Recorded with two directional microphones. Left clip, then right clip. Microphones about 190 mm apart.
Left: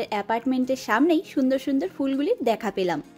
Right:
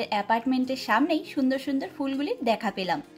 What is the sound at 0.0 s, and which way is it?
A woman's voice, 50° left (ahead or behind).